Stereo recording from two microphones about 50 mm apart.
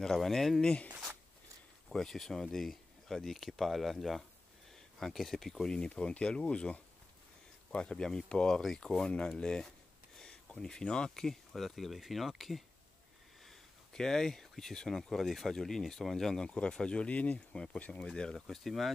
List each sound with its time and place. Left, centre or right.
0.0 s speech: centre
0.6 s speech: centre
1.9 s speech: centre
10.1 s a sound: centre
11.1 s speech: centre
13.9 s speech: centre; by 18.0 s left
18.0 s speech: centre